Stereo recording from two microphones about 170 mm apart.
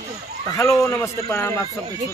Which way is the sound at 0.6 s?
15° left (ahead or behind).